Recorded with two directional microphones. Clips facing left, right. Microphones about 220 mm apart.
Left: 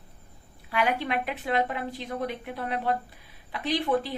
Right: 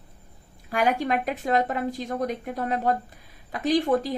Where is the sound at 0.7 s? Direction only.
45° right (ahead or behind).